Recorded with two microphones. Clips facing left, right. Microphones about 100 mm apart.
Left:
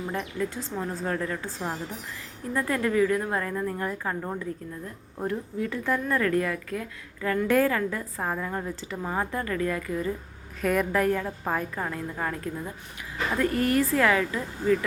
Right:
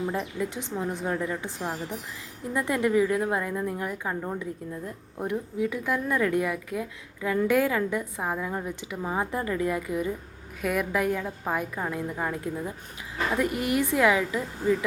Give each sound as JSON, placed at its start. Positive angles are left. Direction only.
{"t": 0.3, "sound": "a woman's voice", "side_deg": -15}